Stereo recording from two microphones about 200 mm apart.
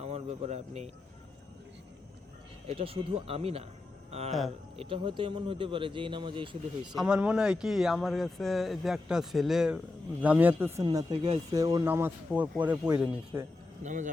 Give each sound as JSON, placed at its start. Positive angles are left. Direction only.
{"t": 0.0, "sound": "speech", "side_deg": -35}
{"t": 2.6, "sound": "speech", "side_deg": -30}
{"t": 6.9, "sound": "speech", "side_deg": -5}
{"t": 10.8, "sound": "speech", "side_deg": -20}
{"t": 13.8, "sound": "speech", "side_deg": -40}